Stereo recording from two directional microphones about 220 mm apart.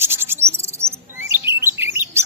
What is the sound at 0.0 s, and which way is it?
Chirp, 10° right (ahead or behind).